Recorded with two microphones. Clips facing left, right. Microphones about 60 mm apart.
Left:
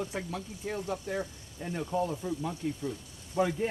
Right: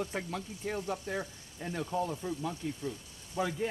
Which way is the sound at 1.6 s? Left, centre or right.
Centre.